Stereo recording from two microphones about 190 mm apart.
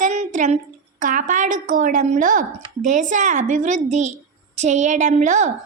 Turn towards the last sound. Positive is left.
turn(degrees=-40)  # may be behind; listen again after turning